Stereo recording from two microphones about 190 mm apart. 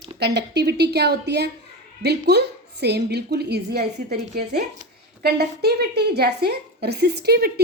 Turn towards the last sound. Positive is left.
turn(degrees=-55)  # may be behind; listen again after turning